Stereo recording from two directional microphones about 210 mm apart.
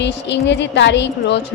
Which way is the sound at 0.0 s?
55° left (ahead or behind).